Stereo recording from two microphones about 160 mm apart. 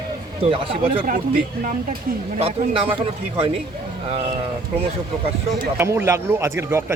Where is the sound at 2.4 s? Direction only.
35° right (ahead or behind).